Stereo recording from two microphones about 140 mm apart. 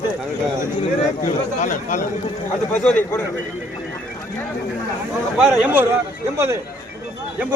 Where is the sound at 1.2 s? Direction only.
65° left (ahead or behind).